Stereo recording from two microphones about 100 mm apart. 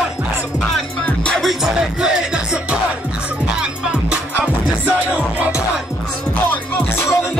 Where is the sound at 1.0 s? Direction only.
10° left (ahead or behind).